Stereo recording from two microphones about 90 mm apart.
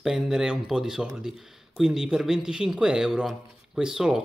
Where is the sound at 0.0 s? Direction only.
5° right (ahead or behind).